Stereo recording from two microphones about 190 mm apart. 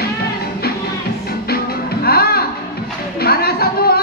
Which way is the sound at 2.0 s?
55° left (ahead or behind).